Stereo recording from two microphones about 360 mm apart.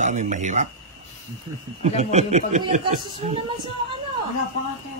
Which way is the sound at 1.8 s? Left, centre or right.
Centre.